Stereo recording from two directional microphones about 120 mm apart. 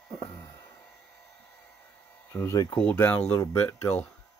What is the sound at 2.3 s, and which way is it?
Speech, 25° left (ahead or behind).